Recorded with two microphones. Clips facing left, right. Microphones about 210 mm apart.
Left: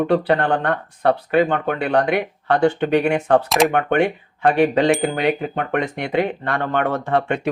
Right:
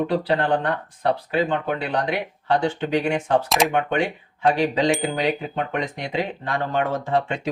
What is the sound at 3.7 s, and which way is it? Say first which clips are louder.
Speech: left 4 dB; 60° left (ahead or behind).